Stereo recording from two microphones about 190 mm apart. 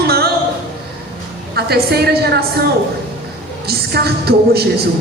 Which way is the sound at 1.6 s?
55° right (ahead or behind).